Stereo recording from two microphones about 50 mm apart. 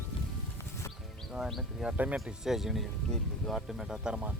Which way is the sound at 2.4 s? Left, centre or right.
Centre.